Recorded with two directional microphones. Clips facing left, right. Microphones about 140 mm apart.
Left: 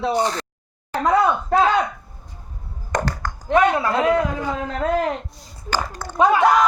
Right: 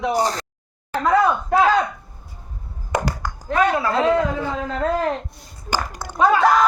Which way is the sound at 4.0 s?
25° right (ahead or behind).